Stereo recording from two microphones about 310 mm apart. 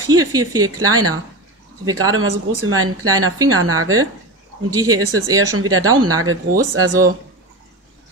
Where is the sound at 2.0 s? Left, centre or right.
Right.